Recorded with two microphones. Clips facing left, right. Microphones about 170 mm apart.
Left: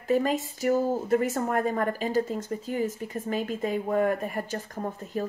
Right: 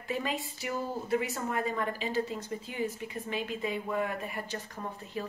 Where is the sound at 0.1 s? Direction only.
45° left (ahead or behind).